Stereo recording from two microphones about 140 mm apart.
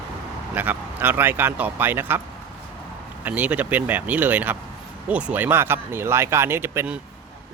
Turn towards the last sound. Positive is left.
turn(degrees=-15)  # may be behind; listen again after turning